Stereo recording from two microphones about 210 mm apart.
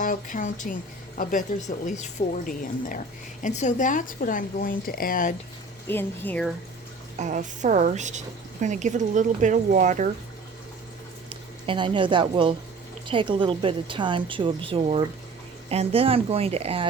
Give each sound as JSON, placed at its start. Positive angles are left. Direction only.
{"t": 0.0, "sound": "a woman's voice", "side_deg": 40}
{"t": 5.9, "sound": "speech", "side_deg": 10}
{"t": 7.2, "sound": "speech", "side_deg": -35}
{"t": 11.3, "sound": "a woman's voice", "side_deg": -25}